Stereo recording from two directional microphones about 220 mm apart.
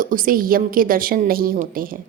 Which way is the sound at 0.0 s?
40° right (ahead or behind).